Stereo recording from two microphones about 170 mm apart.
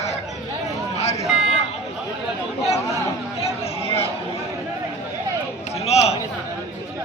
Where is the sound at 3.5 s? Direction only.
35° left (ahead or behind).